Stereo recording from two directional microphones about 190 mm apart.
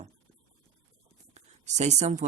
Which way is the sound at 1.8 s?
35° right (ahead or behind).